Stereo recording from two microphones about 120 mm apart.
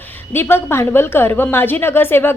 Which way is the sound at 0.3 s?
20° left (ahead or behind).